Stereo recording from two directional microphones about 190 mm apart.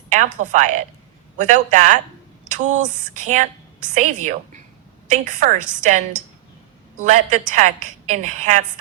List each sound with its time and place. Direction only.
0.4 s a woman's voice: 40° right (ahead or behind)